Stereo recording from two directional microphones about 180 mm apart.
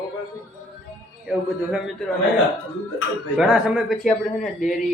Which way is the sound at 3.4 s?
5° right (ahead or behind).